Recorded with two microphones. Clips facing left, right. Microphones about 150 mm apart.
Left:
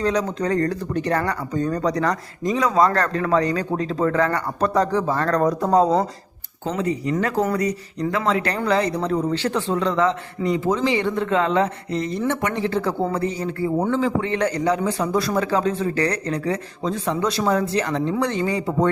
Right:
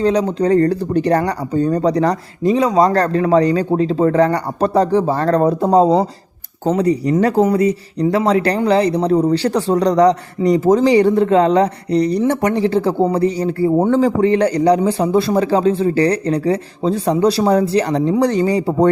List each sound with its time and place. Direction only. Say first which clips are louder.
0.0 s speech: right 6 dB; 30° right (ahead or behind)